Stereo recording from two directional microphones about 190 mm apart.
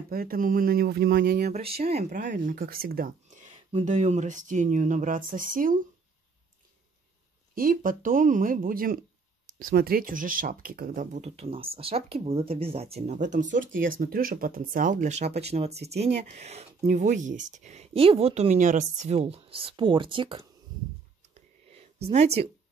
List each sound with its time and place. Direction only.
0.1 s speech: 50° right (ahead or behind)
1.5 s speech: 30° right (ahead or behind); by 3.4 s 50° right (ahead or behind)
3.7 s speech: 40° right (ahead or behind)
7.5 s speech: 45° right (ahead or behind); by 20.4 s 30° right (ahead or behind)
21.6 s a sound: 35° right (ahead or behind)